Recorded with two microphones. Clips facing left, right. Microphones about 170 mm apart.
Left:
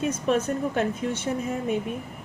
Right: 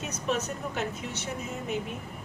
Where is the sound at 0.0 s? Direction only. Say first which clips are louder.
Left 7 dB; 55° left (ahead or behind).